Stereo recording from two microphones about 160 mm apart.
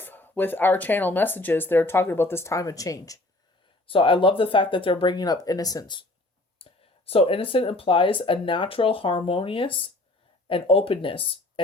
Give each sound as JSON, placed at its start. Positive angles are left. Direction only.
{"t": 0.0, "sound": "speech", "side_deg": 10}
{"t": 3.8, "sound": "speech", "side_deg": 30}
{"t": 6.6, "sound": "speech", "side_deg": 35}